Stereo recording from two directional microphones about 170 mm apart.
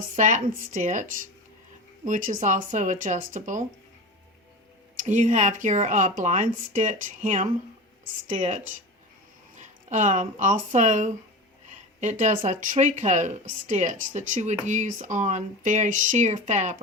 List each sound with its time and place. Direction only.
0.2 s a woman's voice: 50° right (ahead or behind)
2.0 s a woman's voice: 50° right (ahead or behind)
4.9 s a woman's voice: 45° right (ahead or behind)